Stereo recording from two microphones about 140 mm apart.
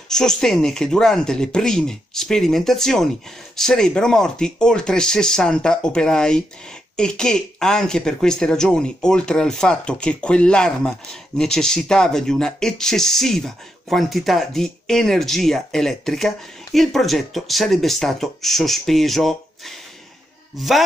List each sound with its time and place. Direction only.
0.1 s speech: 5° left (ahead or behind)